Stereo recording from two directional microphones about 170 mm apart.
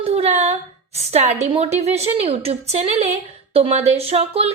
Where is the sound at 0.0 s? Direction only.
40° right (ahead or behind).